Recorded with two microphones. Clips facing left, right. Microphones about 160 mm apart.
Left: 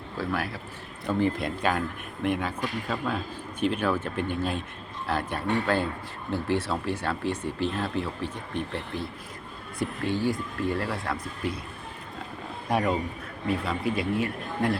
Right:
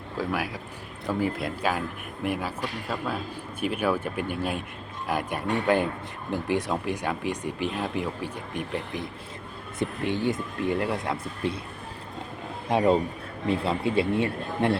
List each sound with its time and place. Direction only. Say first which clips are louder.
0.2 s speech: right 1 dB; 10° right (ahead or behind)
12.6 s speech: right 4 dB; 25° right (ahead or behind)